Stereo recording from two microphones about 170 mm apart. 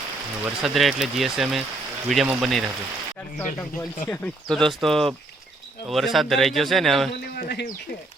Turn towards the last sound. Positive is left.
turn(degrees=70)  # may be behind; listen again after turning